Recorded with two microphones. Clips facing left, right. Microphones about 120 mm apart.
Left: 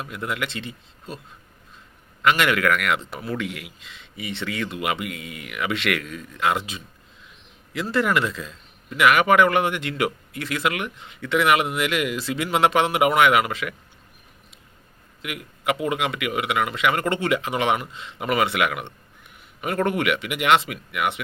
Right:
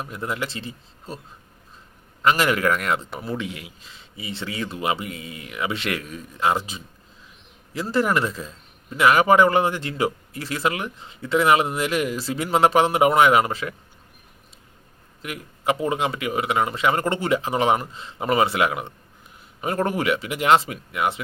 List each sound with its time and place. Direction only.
0.0 s a man's voice: 30° right (ahead or behind)
2.2 s a man's voice: 30° right (ahead or behind)
3.4 s speech: 70° left (ahead or behind)
3.8 s a man's voice: 35° right (ahead or behind)
15.2 s a man's voice: 35° right (ahead or behind)